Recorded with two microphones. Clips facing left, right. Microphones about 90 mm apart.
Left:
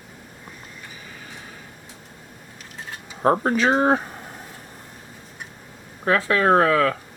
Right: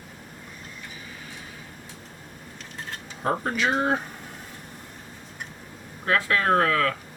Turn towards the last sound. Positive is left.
turn(degrees=25)  # may be behind; listen again after turning